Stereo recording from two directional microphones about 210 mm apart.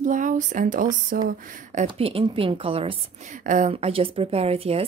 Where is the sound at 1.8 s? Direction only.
25° right (ahead or behind).